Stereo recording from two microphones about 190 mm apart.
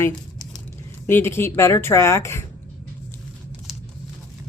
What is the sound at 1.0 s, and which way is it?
Speech, 15° left (ahead or behind).